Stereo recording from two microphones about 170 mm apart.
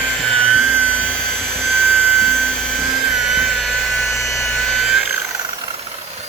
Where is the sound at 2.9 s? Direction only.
Centre (ahead or behind).